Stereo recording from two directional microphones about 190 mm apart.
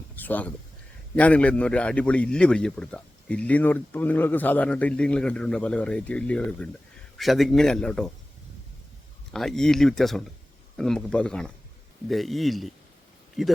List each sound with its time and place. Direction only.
0.2 s a man's voice: 10° left (ahead or behind)
9.3 s speech: centre (ahead or behind)